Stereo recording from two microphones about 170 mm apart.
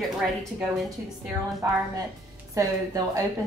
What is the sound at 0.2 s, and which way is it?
Speech, centre (ahead or behind).